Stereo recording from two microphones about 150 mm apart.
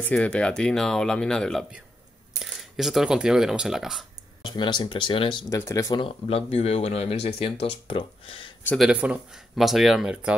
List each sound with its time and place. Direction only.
0.0 s speech: 10° left (ahead or behind)
4.4 s speech: 30° left (ahead or behind)
5.5 s speech: 20° left (ahead or behind)
5.9 s speech: 40° left (ahead or behind)
8.7 s speech: 5° right (ahead or behind)